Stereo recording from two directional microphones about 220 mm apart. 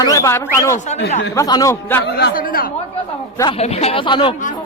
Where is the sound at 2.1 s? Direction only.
45° left (ahead or behind).